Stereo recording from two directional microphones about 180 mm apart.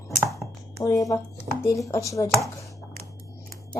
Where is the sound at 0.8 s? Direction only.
20° left (ahead or behind).